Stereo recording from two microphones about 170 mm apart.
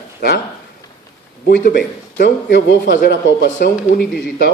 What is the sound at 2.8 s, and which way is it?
Speech, 55° left (ahead or behind).